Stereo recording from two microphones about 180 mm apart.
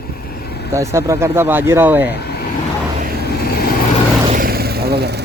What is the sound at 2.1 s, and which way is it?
Vehicle, 60° left (ahead or behind).